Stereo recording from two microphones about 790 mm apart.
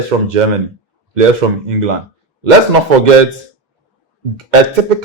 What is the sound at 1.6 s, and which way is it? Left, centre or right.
A man's voice, right.